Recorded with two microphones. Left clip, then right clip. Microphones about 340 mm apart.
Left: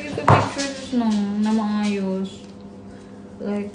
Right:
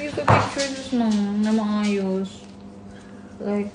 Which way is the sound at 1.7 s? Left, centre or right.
Centre.